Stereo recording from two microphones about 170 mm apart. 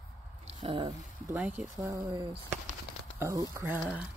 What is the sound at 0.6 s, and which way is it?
Speech, 30° right (ahead or behind).